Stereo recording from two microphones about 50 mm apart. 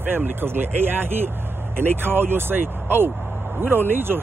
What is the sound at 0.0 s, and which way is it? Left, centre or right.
Speech, right.